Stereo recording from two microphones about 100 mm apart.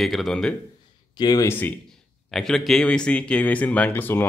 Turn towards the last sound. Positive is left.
turn(degrees=20)  # may be behind; listen again after turning